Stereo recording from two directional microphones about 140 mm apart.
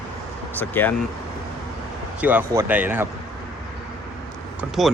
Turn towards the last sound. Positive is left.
turn(degrees=0)  # may be behind; listen again after turning